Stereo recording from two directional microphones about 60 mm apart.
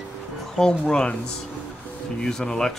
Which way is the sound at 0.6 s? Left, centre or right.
Centre.